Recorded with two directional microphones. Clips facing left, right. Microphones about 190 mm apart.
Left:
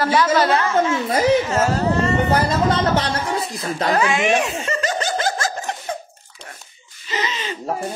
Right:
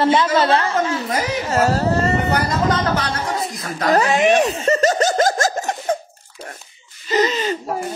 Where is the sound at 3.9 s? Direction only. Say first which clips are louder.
Right 5 dB; 35° right (ahead or behind).